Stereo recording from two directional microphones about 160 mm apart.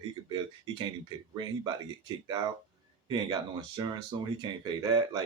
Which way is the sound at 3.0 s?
25° right (ahead or behind).